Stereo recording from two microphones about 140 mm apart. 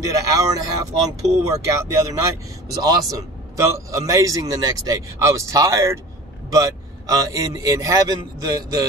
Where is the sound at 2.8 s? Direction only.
25° right (ahead or behind).